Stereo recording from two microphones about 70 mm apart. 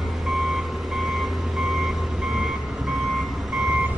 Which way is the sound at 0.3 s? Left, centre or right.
Centre.